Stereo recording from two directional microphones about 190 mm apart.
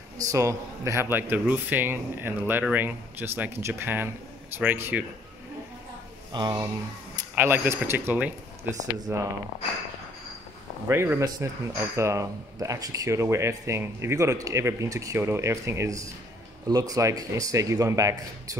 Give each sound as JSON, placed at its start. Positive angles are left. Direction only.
{"t": 0.2, "sound": "speech", "side_deg": -15}
{"t": 6.3, "sound": "speech", "side_deg": -20}
{"t": 10.9, "sound": "speech", "side_deg": -15}